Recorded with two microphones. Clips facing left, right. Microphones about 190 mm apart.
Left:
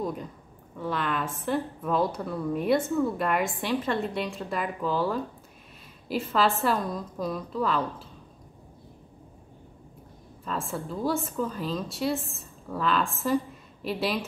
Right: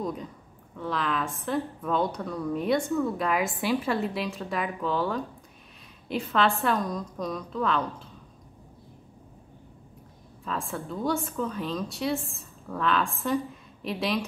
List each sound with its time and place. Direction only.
0.0 s a woman's voice: centre (ahead or behind)
10.4 s a woman's voice: centre (ahead or behind)